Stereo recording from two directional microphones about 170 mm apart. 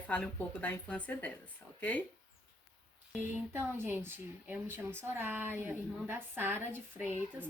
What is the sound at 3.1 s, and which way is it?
Speech, 15° right (ahead or behind).